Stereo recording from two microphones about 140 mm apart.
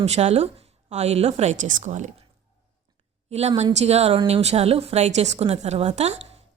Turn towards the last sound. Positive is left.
turn(degrees=-50)  # may be behind; listen again after turning